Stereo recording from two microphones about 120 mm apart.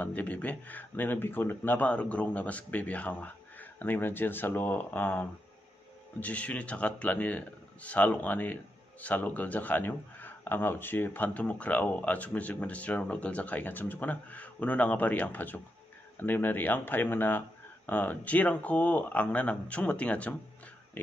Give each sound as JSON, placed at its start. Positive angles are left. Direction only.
{"t": 0.0, "sound": "a man's voice", "side_deg": 10}